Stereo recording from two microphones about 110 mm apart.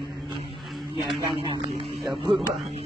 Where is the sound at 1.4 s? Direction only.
45° right (ahead or behind).